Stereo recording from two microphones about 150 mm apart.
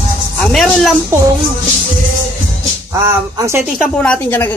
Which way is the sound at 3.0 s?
20° right (ahead or behind).